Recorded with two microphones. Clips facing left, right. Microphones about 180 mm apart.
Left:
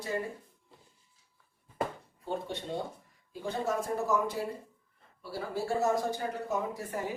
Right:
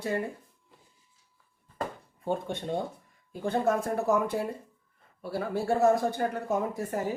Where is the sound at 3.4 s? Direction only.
55° right (ahead or behind).